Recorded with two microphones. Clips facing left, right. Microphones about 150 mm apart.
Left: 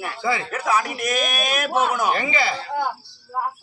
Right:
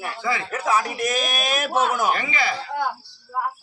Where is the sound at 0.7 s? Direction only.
Centre (ahead or behind).